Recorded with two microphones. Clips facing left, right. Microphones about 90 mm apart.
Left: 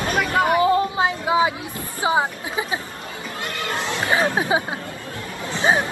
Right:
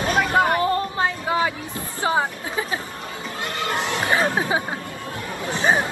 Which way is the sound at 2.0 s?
15° left (ahead or behind).